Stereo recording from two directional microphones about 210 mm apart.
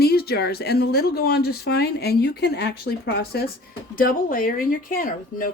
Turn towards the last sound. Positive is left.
turn(degrees=40)  # may be behind; listen again after turning